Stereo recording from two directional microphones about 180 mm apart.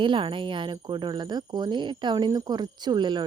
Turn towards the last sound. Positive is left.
turn(degrees=-25)  # may be behind; listen again after turning